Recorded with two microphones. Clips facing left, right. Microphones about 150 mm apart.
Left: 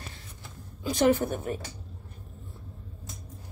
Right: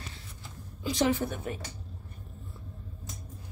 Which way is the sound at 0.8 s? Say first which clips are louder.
Left 4 dB; 50° left (ahead or behind).